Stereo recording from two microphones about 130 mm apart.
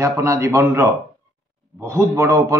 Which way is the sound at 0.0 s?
25° right (ahead or behind).